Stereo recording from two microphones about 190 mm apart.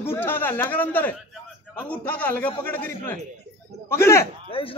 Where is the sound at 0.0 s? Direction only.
10° left (ahead or behind).